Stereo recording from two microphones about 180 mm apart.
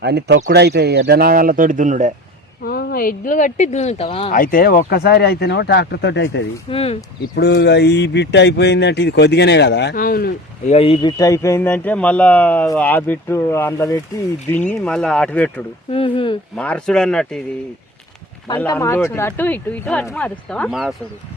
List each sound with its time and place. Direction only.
0.0 s speech: 65° right (ahead or behind); by 2.1 s 40° right (ahead or behind)
2.6 s speech: 55° left (ahead or behind); by 4.3 s 30° left (ahead or behind)
4.3 s speech: 50° left (ahead or behind); by 6.4 s 75° left (ahead or behind)
6.7 s speech: 35° left (ahead or behind)
7.3 s speech: 65° left (ahead or behind)
10.7 s speech: 30° left (ahead or behind)
11.2 s speech: 15° left (ahead or behind)
14.7 s speech: 5° left (ahead or behind)
15.9 s speech: 30° left (ahead or behind)
16.6 s speech: 5° left (ahead or behind)
18.4 s speech: 20° left (ahead or behind); by 20.9 s centre (ahead or behind)